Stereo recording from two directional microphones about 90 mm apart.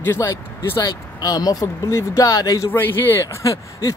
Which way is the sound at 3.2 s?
35° left (ahead or behind).